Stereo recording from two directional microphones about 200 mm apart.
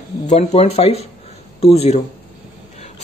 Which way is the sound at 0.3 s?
35° left (ahead or behind).